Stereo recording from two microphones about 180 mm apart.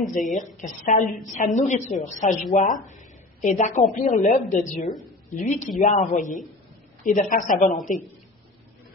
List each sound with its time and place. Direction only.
0.3 s a woman's voice: 45° left (ahead or behind)